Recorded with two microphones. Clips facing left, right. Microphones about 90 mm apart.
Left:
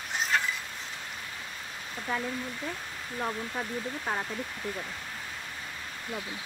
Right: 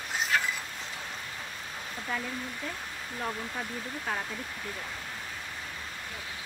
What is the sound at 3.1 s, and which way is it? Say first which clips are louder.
Speech: left 2 dB; 10° left (ahead or behind).